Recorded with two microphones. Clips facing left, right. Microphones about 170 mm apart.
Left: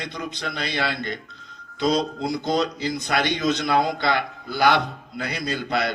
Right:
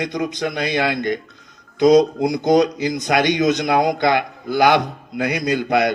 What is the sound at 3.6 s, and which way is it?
A man's voice, 50° right (ahead or behind).